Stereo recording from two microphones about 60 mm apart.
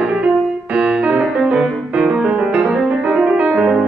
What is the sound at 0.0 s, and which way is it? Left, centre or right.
Music, centre.